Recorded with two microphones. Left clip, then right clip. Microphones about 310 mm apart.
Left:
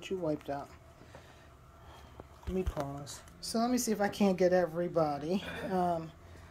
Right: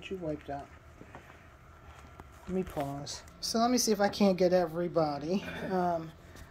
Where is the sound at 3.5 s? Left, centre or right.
Centre.